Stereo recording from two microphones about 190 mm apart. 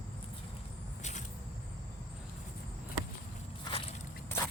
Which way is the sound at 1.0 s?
40° left (ahead or behind).